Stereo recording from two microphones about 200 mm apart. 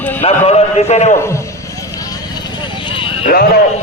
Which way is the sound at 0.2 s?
30° left (ahead or behind).